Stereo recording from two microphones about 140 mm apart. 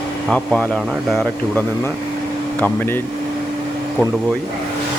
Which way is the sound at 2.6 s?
15° left (ahead or behind).